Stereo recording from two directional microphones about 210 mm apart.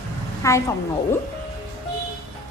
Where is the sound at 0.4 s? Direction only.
15° left (ahead or behind).